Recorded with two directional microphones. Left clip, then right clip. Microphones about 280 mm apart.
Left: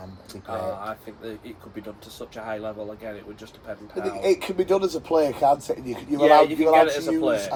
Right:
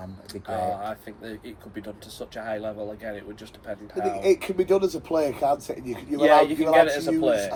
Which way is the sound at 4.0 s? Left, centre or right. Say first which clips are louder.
Right 1 dB; centre.